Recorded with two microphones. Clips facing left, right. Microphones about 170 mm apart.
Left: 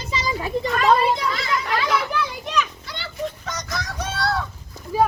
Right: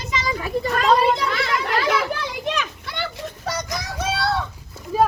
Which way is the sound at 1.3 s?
65° right (ahead or behind).